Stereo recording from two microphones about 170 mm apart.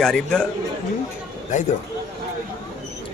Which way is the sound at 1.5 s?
45° left (ahead or behind).